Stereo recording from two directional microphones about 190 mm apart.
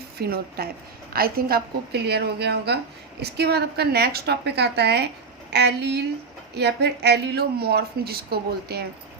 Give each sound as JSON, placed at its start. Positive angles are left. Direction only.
{"t": 0.2, "sound": "speech", "side_deg": -55}